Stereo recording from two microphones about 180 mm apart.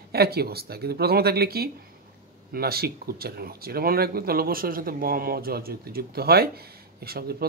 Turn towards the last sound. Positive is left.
turn(degrees=-60)  # may be behind; listen again after turning